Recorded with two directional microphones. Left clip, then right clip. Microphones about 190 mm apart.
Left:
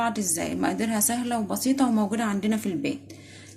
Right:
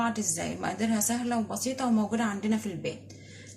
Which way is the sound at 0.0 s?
45° left (ahead or behind).